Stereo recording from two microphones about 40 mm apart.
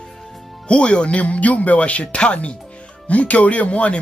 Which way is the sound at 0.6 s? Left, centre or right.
Left.